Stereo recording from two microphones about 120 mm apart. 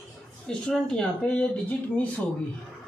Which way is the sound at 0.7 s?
10° left (ahead or behind).